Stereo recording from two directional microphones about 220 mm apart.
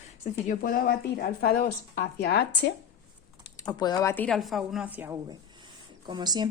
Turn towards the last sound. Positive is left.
turn(degrees=-20)  # may be behind; listen again after turning